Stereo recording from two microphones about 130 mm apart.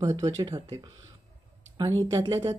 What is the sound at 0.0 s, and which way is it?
Speech, 30° right (ahead or behind).